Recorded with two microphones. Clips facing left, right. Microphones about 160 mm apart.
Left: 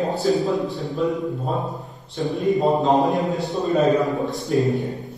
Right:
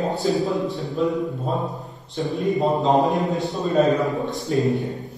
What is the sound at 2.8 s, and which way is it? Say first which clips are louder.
A man's voice: even; centre (ahead or behind).